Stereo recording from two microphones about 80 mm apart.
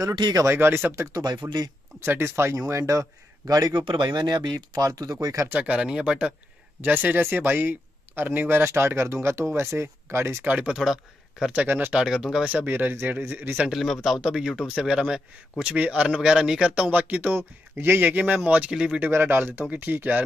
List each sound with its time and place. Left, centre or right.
0.1 s speech: right
0.4 s speech: right
1.1 s speech: right
2.0 s speech: right
3.8 s speech: right
4.8 s speech: right
5.5 s speech: centre
6.8 s speech: right
10.5 s speech: centre
11.5 s speech: right
11.9 s speech: centre
12.5 s speech: right
13.6 s a man's voice: centre
19.0 s speech: right